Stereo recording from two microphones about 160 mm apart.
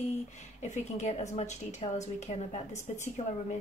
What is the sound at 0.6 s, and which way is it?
A woman's voice, 45° left (ahead or behind).